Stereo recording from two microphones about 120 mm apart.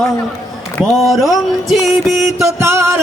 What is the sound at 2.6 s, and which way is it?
Speech, 20° right (ahead or behind).